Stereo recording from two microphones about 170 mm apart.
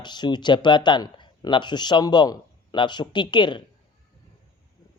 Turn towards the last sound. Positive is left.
turn(degrees=25)  # may be behind; listen again after turning